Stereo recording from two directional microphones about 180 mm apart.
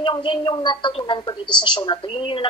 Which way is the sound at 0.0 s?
25° left (ahead or behind).